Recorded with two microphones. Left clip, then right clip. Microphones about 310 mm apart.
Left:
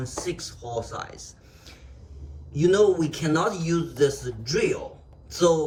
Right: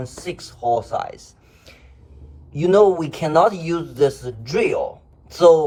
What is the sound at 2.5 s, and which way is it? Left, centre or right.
Speech, centre.